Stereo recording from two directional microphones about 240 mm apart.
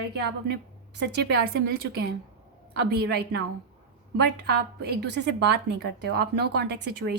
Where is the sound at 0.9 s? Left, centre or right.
Right.